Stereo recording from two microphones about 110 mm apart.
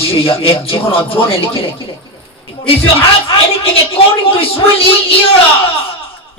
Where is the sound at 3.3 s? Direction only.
55° left (ahead or behind).